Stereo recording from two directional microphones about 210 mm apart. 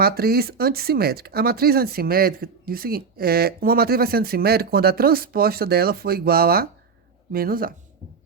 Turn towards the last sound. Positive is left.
turn(degrees=-45)  # may be behind; listen again after turning